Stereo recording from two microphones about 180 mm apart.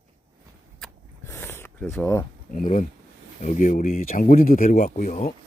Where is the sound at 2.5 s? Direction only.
45° left (ahead or behind).